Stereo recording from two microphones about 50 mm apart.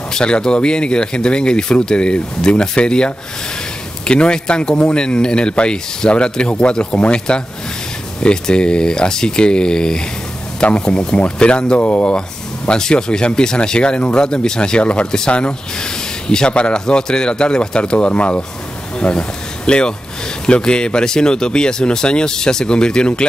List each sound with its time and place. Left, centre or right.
0.1 s speech: centre